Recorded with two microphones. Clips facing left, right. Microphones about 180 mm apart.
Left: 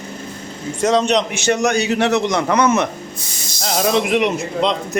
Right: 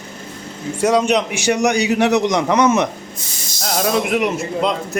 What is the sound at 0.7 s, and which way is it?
A man's voice, 10° right (ahead or behind).